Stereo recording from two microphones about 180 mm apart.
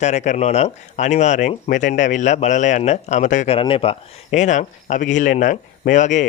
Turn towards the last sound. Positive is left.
turn(degrees=40)  # may be behind; listen again after turning